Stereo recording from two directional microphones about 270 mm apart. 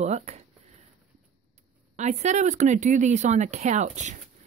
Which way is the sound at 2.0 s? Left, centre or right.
Right.